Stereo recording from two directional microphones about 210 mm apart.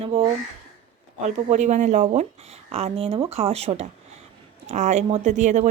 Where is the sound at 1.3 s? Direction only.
35° right (ahead or behind).